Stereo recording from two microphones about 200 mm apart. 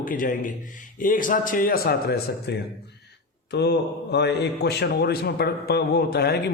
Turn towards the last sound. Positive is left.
turn(degrees=55)  # may be behind; listen again after turning